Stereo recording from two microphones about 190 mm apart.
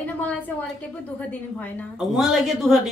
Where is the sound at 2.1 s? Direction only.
Centre (ahead or behind).